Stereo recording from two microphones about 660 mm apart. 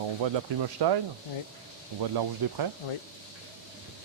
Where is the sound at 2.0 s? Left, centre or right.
Right.